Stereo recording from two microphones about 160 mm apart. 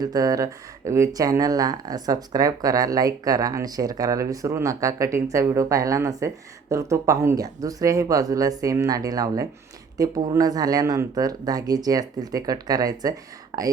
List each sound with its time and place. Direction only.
0.0 s speech: 20° right (ahead or behind)